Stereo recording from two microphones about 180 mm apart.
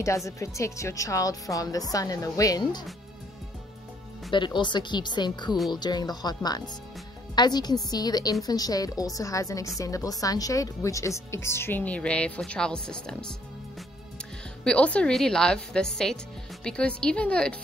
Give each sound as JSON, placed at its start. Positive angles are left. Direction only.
{"t": 0.0, "sound": "speech", "side_deg": 15}
{"t": 4.3, "sound": "speech", "side_deg": 25}
{"t": 14.6, "sound": "a woman's voice", "side_deg": 5}